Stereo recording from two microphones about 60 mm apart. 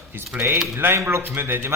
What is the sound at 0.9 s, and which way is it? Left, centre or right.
Speech, right.